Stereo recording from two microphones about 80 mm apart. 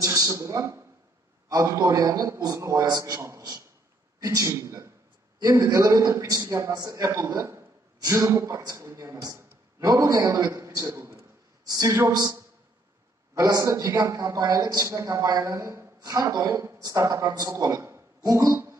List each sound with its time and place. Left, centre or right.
0.0 s a man's voice: right
6.4 s a man's voice: right
6.7 s a man's voice: right
10.9 s a sound: right
11.6 s a man's voice: right
16.0 s a woman's voice: right